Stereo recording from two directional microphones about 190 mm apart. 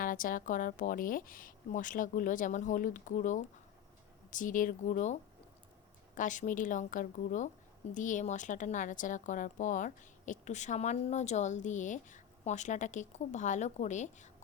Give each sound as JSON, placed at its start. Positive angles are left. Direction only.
{"t": 0.0, "sound": "speech", "side_deg": 45}
{"t": 6.1, "sound": "a woman's voice", "side_deg": 40}